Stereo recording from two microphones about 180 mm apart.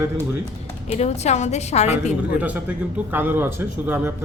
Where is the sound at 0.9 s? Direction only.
35° left (ahead or behind).